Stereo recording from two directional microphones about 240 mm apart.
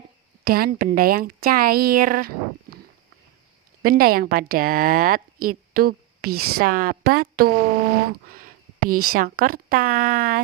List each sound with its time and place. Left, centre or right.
0.4 s speech: right
3.8 s speech: right
8.9 s speech: right
9.1 s speech: right